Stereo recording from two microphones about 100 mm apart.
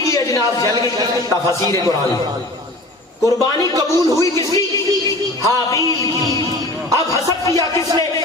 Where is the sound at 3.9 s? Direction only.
30° left (ahead or behind).